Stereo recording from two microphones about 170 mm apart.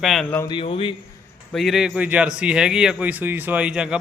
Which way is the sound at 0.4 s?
30° left (ahead or behind).